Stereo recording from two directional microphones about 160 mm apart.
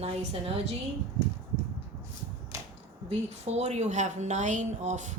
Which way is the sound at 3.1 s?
40° right (ahead or behind).